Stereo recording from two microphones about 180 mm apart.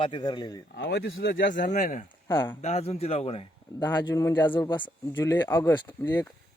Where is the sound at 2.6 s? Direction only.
35° left (ahead or behind).